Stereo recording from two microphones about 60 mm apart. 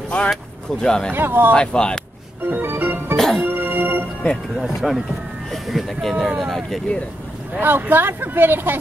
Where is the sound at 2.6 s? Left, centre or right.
Right.